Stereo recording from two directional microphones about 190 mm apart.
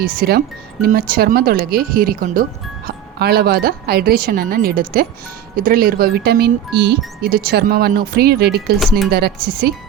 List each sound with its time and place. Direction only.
0.0 s speech: 50° right (ahead or behind)